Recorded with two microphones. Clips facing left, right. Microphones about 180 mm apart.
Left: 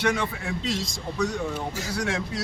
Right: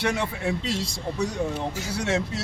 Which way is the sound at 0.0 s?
25° right (ahead or behind).